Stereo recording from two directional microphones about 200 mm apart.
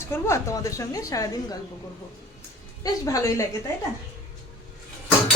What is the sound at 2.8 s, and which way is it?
Speech, 15° left (ahead or behind).